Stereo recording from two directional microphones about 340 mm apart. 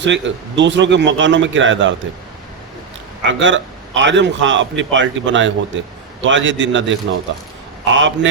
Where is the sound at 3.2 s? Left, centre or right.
Right.